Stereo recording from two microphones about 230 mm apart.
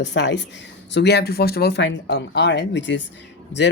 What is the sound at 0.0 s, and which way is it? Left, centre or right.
Speech, left.